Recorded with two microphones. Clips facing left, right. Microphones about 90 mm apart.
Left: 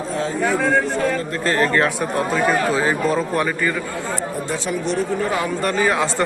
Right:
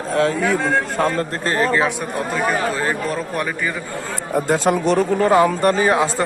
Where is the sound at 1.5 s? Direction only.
15° right (ahead or behind).